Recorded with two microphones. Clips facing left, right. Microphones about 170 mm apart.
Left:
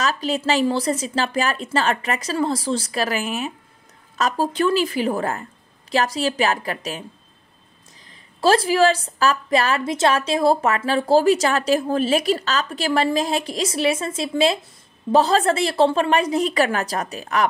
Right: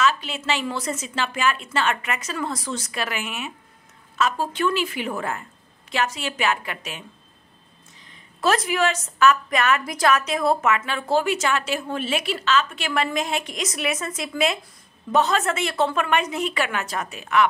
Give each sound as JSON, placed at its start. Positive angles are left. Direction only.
{"t": 0.0, "sound": "a woman's voice", "side_deg": 40}
{"t": 8.1, "sound": "a woman's voice", "side_deg": 30}